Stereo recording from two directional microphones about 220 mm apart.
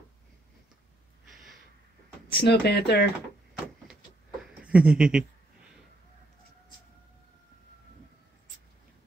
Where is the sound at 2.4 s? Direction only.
50° left (ahead or behind).